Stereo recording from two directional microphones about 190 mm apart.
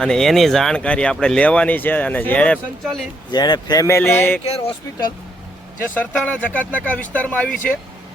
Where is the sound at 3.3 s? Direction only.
20° left (ahead or behind).